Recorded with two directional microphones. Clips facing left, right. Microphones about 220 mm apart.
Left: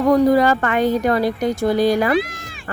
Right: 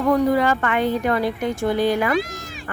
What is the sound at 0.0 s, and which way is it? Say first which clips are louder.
Speech: left 4 dB; 40° left (ahead or behind).